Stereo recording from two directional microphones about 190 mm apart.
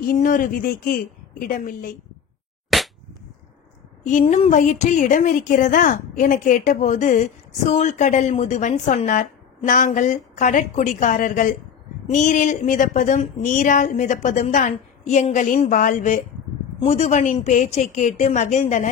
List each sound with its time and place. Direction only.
0.0 s a woman's voice: 45° left (ahead or behind)
2.7 s cap gun: centre (ahead or behind)
4.1 s speech: 35° left (ahead or behind)